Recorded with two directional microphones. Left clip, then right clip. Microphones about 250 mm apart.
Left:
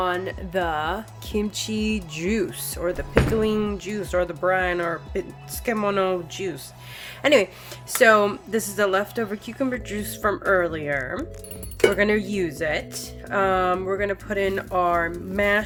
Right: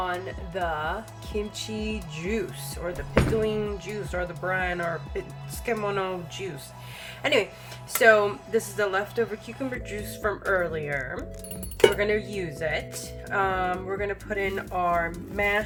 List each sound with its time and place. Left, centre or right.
0.0 s speech: left